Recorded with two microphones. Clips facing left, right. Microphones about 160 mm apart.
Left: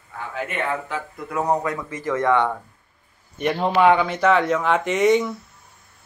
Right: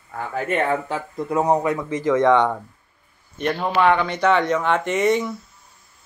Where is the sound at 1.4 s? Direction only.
20° right (ahead or behind).